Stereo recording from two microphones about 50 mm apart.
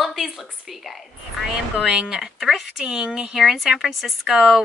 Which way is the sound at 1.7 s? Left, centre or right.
Centre.